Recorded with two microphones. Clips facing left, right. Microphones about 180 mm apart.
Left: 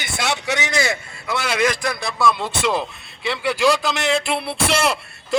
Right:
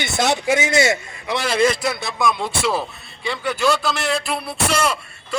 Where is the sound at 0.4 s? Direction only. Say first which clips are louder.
Right 4 dB; 25° right (ahead or behind).